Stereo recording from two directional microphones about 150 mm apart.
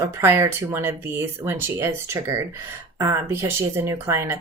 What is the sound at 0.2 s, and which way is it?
Speech, 15° right (ahead or behind).